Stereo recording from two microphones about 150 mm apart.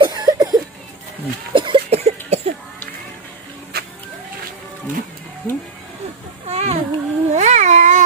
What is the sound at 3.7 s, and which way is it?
Vehicle, 90° right.